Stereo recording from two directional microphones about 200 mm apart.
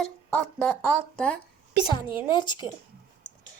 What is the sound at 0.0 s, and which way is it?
Speech, 5° left (ahead or behind).